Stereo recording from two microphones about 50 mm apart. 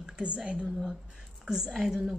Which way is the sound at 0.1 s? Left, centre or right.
Right.